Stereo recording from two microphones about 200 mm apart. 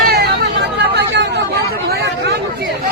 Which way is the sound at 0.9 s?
60° right (ahead or behind).